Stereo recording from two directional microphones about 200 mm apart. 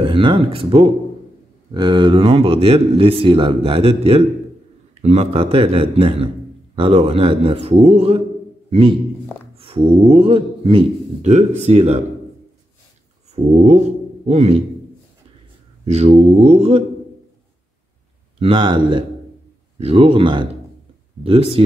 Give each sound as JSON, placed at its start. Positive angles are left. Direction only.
{"t": 0.0, "sound": "a man's voice", "side_deg": -25}
{"t": 8.6, "sound": "a sound", "side_deg": -30}
{"t": 9.6, "sound": "speech", "side_deg": -25}
{"t": 13.3, "sound": "speech", "side_deg": -35}
{"t": 15.8, "sound": "speech", "side_deg": -30}
{"t": 18.4, "sound": "a man's voice", "side_deg": -25}